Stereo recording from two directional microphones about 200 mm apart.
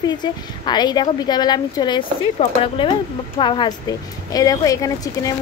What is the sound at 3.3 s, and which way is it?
A woman's voice, 25° left (ahead or behind).